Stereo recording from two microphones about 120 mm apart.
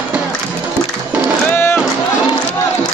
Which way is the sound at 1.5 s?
15° left (ahead or behind).